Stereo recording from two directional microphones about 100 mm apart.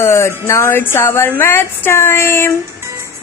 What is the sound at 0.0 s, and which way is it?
A woman's voice, 25° left (ahead or behind).